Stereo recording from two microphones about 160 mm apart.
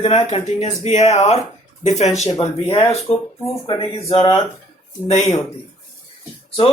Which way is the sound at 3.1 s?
30° left (ahead or behind).